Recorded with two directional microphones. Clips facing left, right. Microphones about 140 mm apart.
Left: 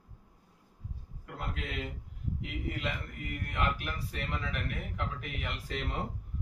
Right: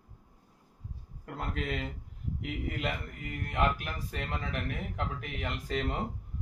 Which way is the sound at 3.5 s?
45° right (ahead or behind).